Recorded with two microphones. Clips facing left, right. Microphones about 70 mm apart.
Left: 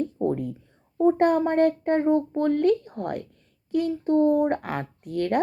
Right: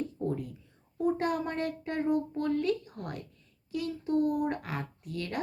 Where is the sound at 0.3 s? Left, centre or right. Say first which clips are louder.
Left 8 dB; left.